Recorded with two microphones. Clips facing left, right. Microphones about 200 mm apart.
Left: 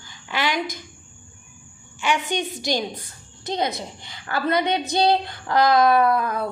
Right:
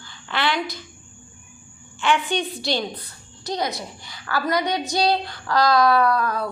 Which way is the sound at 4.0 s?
25° left (ahead or behind).